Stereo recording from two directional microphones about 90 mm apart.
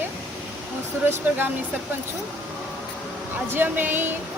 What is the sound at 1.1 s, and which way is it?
Speech, 20° right (ahead or behind).